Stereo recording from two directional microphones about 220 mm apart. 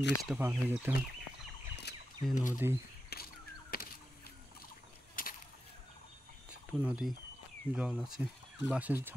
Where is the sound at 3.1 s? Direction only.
45° left (ahead or behind).